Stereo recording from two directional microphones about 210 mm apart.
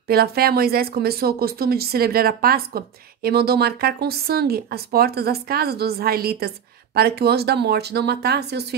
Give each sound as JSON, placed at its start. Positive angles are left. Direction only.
{"t": 0.1, "sound": "speech", "side_deg": -45}